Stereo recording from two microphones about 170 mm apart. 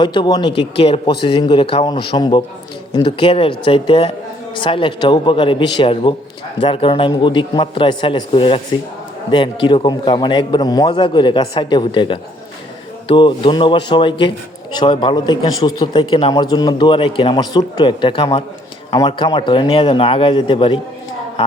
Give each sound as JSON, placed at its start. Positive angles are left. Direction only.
{"t": 0.0, "sound": "a man's voice", "side_deg": 25}